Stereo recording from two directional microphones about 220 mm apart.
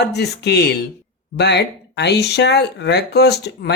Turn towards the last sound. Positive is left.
turn(degrees=50)  # may be behind; listen again after turning